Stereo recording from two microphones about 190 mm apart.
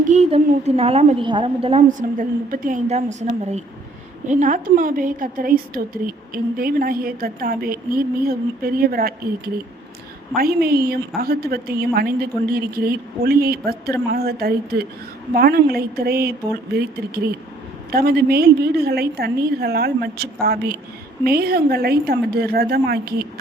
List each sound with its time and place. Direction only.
0.0 s a woman's voice: 35° right (ahead or behind)
1.9 s a woman's voice: 45° right (ahead or behind)
2.9 s a woman's voice: 35° right (ahead or behind); by 16.3 s 55° right (ahead or behind)
17.9 s a woman's voice: 55° right (ahead or behind)